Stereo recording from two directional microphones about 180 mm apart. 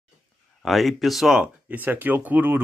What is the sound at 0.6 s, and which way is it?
A man's voice, centre (ahead or behind).